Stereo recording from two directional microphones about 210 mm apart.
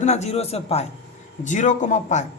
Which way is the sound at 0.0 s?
35° left (ahead or behind).